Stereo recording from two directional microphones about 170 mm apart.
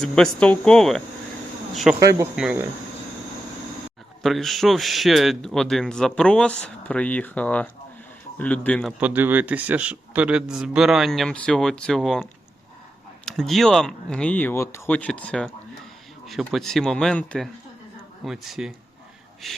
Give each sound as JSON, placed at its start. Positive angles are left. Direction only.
{"t": 0.0, "sound": "a man's voice", "side_deg": 5}
{"t": 2.0, "sound": "speech", "side_deg": -20}
{"t": 2.3, "sound": "speech", "side_deg": -5}
{"t": 4.2, "sound": "a man's voice", "side_deg": 0}
{"t": 9.0, "sound": "a man's voice", "side_deg": -10}